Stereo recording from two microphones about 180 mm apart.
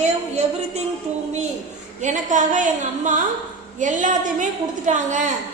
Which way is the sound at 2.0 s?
45° right (ahead or behind).